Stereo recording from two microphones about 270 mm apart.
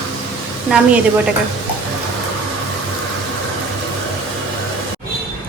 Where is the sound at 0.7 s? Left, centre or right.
Centre.